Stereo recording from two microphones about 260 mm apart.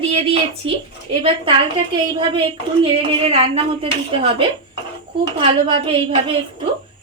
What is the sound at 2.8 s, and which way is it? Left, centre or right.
A woman's voice, right.